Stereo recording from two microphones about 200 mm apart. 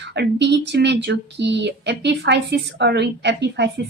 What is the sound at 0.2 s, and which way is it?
Speech, 60° right (ahead or behind).